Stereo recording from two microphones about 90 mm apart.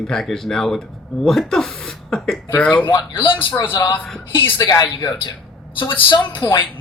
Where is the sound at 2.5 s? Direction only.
20° left (ahead or behind).